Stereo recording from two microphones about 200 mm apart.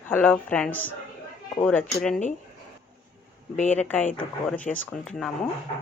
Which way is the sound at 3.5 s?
35° left (ahead or behind).